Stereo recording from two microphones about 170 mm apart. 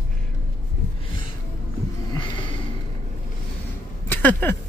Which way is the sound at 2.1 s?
30° left (ahead or behind).